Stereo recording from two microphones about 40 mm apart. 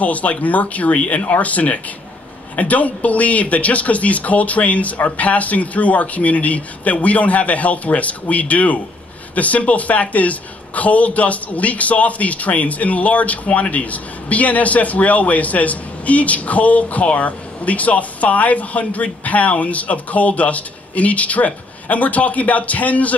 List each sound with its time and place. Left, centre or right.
0.0 s a woman's voice: left